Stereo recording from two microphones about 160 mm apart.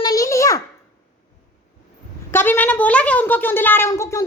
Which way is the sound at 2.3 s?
10° left (ahead or behind).